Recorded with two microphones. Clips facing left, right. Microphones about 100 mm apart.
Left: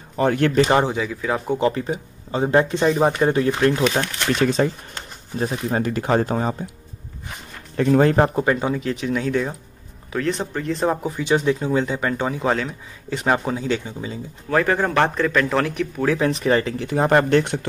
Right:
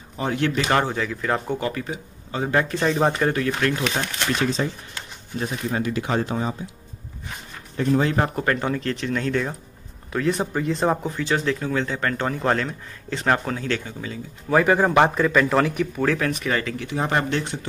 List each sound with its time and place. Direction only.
0.2 s speech: 50° left (ahead or behind)
0.7 s speech: 15° left (ahead or behind)
1.6 s speech: 30° left (ahead or behind)
4.4 s speech: 55° left (ahead or behind)
5.4 s speech: 35° left (ahead or behind)
7.7 s speech: 60° left (ahead or behind)
8.4 s speech: 10° left (ahead or behind)
10.1 s speech: 5° right (ahead or behind)
11.1 s speech: 15° left (ahead or behind)
14.5 s speech: 10° right (ahead or behind)
16.2 s speech: 30° left (ahead or behind)
16.9 s speech: 45° left (ahead or behind)